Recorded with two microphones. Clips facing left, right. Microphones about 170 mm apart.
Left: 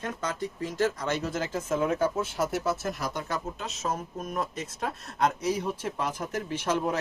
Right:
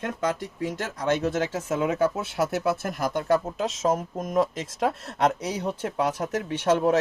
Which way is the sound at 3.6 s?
90° right.